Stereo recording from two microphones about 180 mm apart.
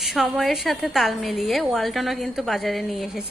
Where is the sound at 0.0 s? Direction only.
Centre (ahead or behind).